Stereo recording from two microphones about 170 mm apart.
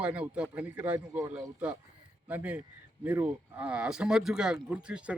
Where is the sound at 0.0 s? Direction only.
5° right (ahead or behind).